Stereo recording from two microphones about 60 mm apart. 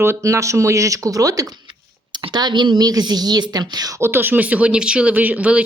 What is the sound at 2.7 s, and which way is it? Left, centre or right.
A woman's voice, right.